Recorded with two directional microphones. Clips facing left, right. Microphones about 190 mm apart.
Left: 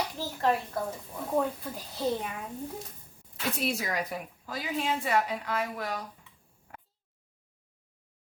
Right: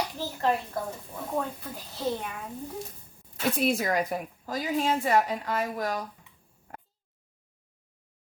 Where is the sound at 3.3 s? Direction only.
50° right (ahead or behind).